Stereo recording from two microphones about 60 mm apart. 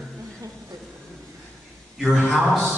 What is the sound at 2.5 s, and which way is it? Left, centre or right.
Speech, centre.